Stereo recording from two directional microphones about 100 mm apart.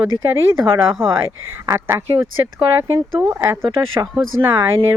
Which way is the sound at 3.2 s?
25° right (ahead or behind).